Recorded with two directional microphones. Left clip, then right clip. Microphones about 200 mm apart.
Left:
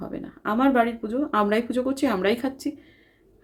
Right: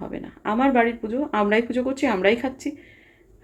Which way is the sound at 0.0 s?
10° left (ahead or behind).